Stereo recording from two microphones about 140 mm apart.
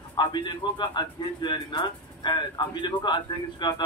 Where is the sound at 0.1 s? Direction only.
30° left (ahead or behind).